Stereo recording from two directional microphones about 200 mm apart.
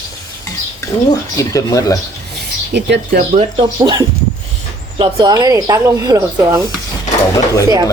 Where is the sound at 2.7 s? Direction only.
60° right (ahead or behind).